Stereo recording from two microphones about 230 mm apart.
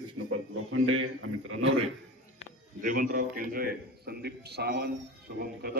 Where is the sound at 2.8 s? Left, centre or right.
Right.